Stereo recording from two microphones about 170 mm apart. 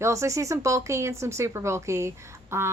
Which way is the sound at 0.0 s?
15° right (ahead or behind).